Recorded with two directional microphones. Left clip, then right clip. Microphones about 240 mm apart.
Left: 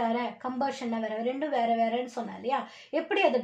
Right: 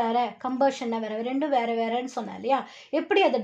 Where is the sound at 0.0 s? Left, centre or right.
Right.